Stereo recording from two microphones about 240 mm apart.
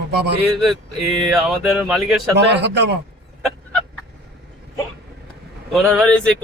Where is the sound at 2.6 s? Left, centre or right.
Right.